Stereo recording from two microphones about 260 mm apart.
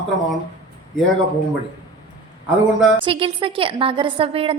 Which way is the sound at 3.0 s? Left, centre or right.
Centre.